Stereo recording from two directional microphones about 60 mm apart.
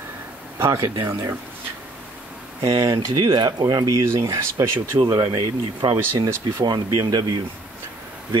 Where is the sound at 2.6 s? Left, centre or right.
Right.